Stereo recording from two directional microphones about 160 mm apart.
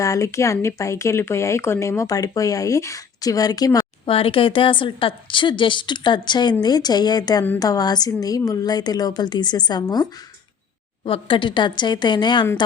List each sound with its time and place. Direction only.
0.0 s speech: 20° left (ahead or behind)